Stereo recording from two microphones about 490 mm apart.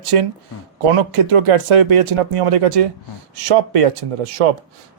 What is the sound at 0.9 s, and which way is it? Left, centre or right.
A man's voice, right.